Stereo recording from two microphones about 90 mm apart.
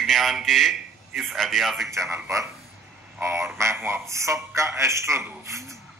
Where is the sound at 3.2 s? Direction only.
30° right (ahead or behind).